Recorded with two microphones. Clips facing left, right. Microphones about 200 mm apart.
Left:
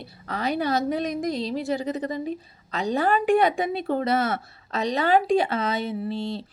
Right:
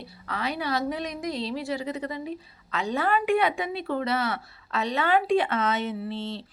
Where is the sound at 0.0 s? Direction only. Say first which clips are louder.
Left 3 dB; 45° left (ahead or behind).